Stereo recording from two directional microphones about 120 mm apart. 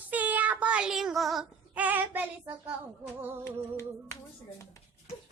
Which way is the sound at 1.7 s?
15° right (ahead or behind).